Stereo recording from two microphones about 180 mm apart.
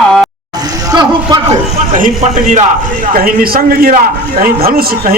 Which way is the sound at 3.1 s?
55° right (ahead or behind).